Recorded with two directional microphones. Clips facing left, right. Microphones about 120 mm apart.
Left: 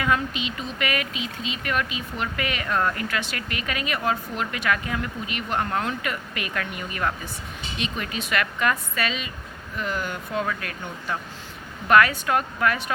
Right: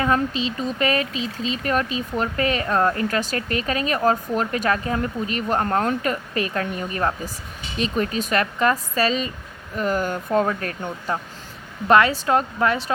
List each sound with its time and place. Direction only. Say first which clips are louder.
0.0 s speech: right 4 dB; 35° right (ahead or behind)